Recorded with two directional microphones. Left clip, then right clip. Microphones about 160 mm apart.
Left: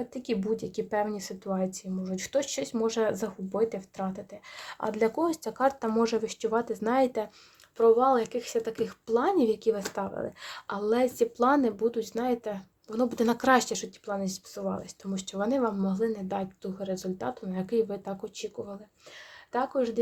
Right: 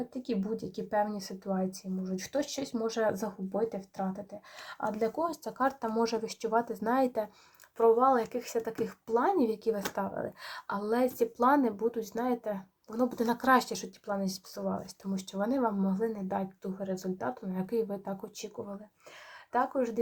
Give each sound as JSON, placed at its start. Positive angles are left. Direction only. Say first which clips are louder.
{"t": 0.6, "sound": "speech", "louder": "left 2 dB", "side_deg": 45}